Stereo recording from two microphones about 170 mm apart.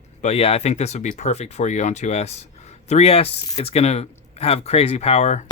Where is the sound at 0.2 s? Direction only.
40° left (ahead or behind).